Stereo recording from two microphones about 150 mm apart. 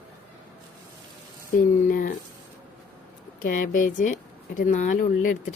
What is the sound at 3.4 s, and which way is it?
Speech, 70° left (ahead or behind).